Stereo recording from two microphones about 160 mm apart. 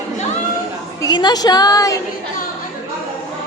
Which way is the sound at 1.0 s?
25° left (ahead or behind).